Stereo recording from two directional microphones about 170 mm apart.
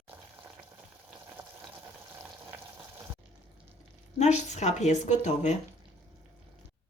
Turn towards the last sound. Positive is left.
turn(degrees=45)  # may be behind; listen again after turning